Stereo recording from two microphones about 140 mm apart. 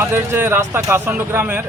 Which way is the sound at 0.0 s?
15° right (ahead or behind).